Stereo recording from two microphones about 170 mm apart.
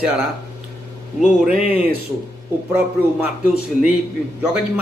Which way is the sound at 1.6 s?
40° left (ahead or behind).